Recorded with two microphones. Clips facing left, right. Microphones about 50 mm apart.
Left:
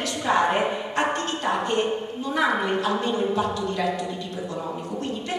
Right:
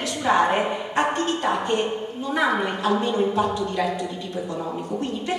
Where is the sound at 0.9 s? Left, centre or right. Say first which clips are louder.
Right 2 dB; centre.